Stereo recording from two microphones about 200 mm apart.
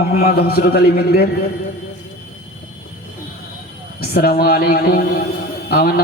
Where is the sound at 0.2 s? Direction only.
50° left (ahead or behind).